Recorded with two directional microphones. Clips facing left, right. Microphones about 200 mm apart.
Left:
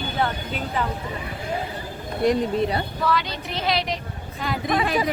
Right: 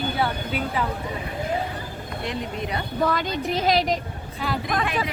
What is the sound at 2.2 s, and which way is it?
Speech, 35° left (ahead or behind).